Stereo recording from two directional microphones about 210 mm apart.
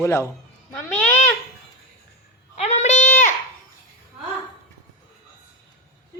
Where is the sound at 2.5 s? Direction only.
30° left (ahead or behind).